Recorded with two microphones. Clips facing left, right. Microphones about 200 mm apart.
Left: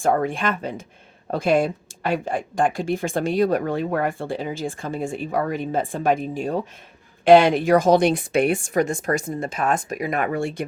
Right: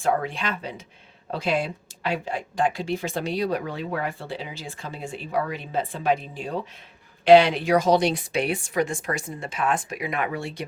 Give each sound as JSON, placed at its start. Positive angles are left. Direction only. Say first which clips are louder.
{"t": 0.0, "sound": "speech", "louder": "left 4 dB", "side_deg": 45}